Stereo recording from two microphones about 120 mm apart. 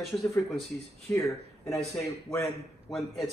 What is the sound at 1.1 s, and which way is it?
Speech, 25° left (ahead or behind).